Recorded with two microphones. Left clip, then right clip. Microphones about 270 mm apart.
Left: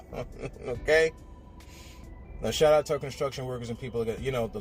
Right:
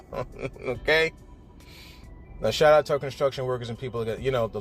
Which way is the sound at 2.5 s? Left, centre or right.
Right.